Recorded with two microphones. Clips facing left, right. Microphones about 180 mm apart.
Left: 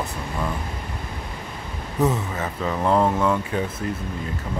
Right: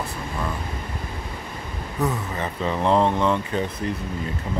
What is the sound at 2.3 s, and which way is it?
Speech, centre (ahead or behind).